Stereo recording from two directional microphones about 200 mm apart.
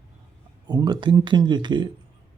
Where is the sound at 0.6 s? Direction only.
20° right (ahead or behind).